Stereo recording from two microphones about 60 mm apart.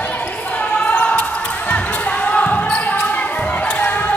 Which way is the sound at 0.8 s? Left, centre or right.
Left.